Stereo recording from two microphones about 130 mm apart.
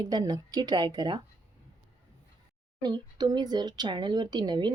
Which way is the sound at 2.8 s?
35° right (ahead or behind).